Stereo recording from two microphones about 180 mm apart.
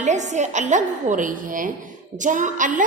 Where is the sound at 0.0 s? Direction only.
40° right (ahead or behind).